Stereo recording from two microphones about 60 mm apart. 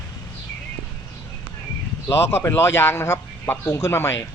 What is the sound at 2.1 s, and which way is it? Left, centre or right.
A man's voice, left.